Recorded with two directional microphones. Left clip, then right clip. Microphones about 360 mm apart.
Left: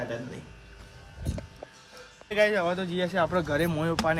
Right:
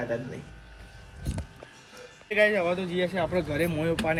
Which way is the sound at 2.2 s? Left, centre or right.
Centre.